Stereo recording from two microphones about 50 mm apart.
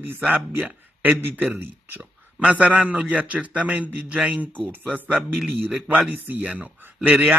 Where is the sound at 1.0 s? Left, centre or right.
Right.